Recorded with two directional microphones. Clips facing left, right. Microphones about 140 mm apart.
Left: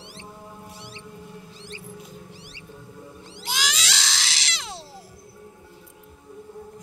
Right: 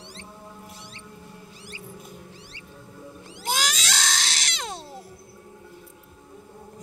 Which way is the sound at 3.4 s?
45° right (ahead or behind).